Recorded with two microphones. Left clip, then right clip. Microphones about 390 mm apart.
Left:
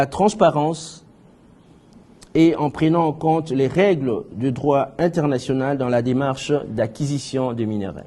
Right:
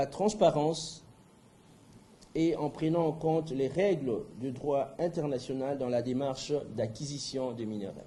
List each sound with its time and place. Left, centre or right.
0.0 s speech: left
2.3 s speech: left